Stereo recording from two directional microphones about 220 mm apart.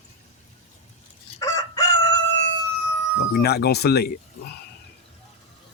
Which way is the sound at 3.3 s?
45° left (ahead or behind).